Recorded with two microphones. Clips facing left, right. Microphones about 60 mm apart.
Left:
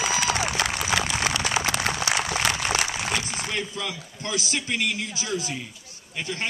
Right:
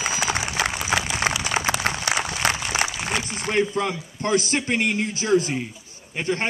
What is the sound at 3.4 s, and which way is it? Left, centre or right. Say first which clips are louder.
A man's voice: right 8 dB; right.